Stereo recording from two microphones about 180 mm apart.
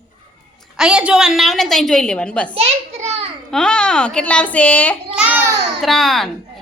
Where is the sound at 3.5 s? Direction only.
5° left (ahead or behind).